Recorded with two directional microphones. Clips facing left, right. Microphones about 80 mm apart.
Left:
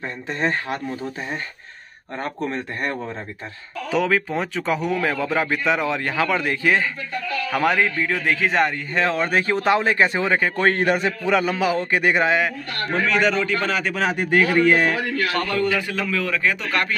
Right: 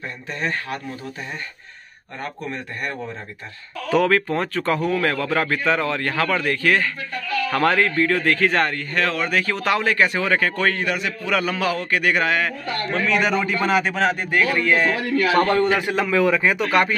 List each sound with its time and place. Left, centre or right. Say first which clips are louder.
0.3 s a man's voice: left 3 dB; left
2.4 s a man's voice: left 4 dB; left
3.9 s speech: right 3 dB; centre
10.6 s a man's voice: left 3 dB; left
11.2 s a man's voice: left 1 dB; centre
13.2 s a man's voice: even; centre
14.1 s speech: left 3 dB; centre
15.5 s a man's voice: right 3 dB; right